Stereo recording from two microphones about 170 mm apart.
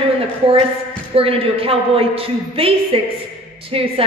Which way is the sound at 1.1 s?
35° right (ahead or behind).